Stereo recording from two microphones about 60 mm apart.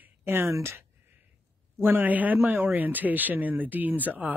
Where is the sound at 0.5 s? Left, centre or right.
Right.